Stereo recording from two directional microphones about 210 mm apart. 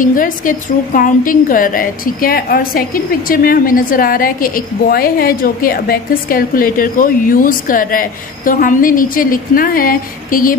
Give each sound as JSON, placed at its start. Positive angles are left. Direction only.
{"t": 0.0, "sound": "a woman's voice", "side_deg": 40}